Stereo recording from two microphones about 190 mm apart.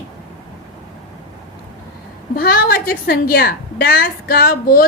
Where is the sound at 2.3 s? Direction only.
55° left (ahead or behind).